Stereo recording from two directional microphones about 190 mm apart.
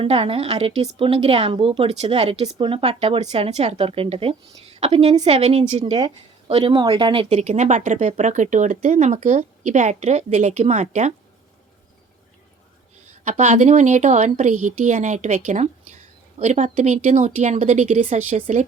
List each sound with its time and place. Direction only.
0.0 s a woman's voice: 30° right (ahead or behind)
13.2 s a woman's voice: 35° right (ahead or behind)